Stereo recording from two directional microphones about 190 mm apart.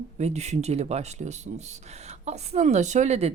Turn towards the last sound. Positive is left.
turn(degrees=-35)  # may be behind; listen again after turning